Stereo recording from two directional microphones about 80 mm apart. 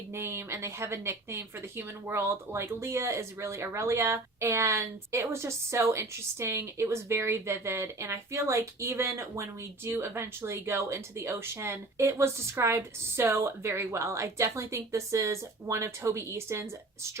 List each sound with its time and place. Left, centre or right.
0.1 s speech: right